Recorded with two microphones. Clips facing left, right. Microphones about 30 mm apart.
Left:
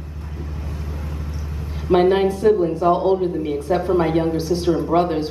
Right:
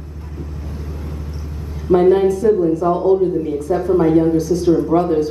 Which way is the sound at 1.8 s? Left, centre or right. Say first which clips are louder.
Right 3 dB; left.